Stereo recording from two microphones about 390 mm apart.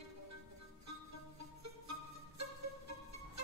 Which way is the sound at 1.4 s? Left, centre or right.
Right.